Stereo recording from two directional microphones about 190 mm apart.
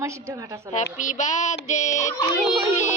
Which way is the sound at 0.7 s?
40° left (ahead or behind).